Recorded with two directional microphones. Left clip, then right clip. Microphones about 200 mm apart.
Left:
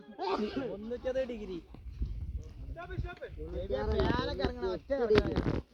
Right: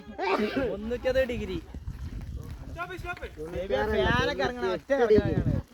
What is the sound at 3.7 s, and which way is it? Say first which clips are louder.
Speech: right 7 dB; 5° left (ahead or behind).